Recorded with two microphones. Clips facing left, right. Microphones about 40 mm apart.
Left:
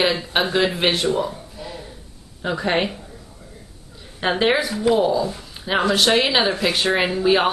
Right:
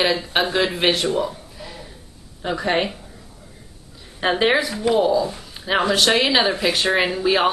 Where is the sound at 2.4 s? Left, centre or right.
Centre.